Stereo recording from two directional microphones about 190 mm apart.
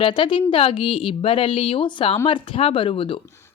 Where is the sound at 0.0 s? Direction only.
25° left (ahead or behind).